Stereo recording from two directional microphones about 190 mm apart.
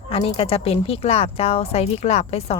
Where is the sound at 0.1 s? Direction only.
30° left (ahead or behind).